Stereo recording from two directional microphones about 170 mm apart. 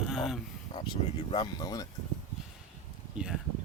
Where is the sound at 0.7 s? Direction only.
35° left (ahead or behind).